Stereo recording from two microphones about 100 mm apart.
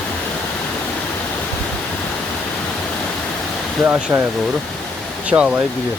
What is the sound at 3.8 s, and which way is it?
Speech, 10° right (ahead or behind).